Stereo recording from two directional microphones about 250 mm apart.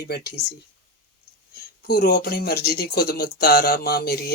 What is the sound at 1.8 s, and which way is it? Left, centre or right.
Speech, left.